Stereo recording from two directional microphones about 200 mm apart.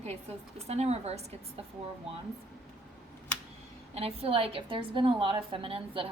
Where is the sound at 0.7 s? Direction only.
30° right (ahead or behind).